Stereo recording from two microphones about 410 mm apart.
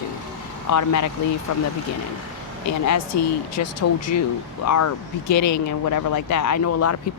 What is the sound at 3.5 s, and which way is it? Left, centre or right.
Speech, left.